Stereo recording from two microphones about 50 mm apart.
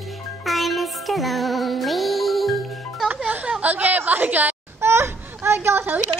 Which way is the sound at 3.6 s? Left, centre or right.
Right.